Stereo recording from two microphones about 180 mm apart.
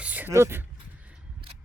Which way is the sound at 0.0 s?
10° right (ahead or behind).